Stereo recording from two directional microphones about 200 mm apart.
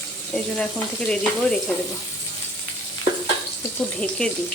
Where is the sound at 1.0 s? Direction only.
5° left (ahead or behind).